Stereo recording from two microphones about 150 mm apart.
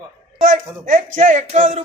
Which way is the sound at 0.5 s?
55° right (ahead or behind).